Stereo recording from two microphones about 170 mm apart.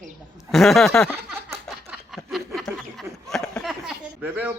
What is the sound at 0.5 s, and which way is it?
Speech, centre (ahead or behind).